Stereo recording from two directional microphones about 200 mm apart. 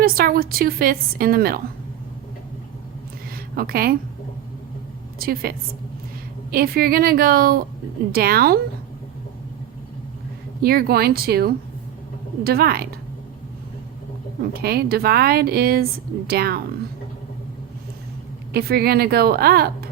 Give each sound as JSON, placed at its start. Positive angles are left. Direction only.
{"t": 0.0, "sound": "a woman's voice", "side_deg": -45}
{"t": 3.5, "sound": "a woman's voice", "side_deg": -50}
{"t": 5.2, "sound": "a woman's voice", "side_deg": -50}
{"t": 10.6, "sound": "a woman's voice", "side_deg": -50}
{"t": 14.6, "sound": "a woman's voice", "side_deg": -50}
{"t": 18.5, "sound": "a woman's voice", "side_deg": -50}